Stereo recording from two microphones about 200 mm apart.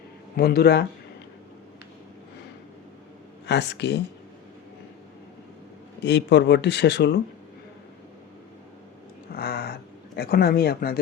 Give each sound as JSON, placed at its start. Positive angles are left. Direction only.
{"t": 0.3, "sound": "speech", "side_deg": 50}
{"t": 3.4, "sound": "speech", "side_deg": 60}
{"t": 6.0, "sound": "speech", "side_deg": 60}
{"t": 9.3, "sound": "cat", "side_deg": 50}
{"t": 10.2, "sound": "speech", "side_deg": 50}